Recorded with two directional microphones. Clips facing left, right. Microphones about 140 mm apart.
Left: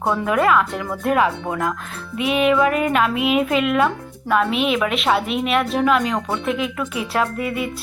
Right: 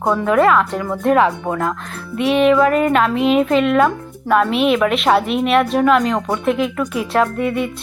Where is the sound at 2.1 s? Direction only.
5° left (ahead or behind).